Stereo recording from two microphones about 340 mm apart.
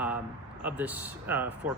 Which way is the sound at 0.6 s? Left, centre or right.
Centre.